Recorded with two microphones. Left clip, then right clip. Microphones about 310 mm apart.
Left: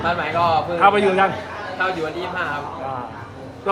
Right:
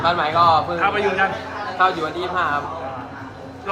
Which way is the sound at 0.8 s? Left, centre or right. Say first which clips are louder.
Left 4 dB; centre.